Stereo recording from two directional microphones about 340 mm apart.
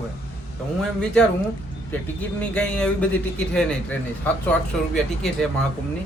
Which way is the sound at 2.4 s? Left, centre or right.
Centre.